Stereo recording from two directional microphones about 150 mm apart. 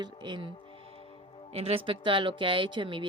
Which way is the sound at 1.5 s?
45° right (ahead or behind).